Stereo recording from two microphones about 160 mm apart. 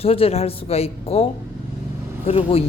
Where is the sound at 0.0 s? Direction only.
35° left (ahead or behind).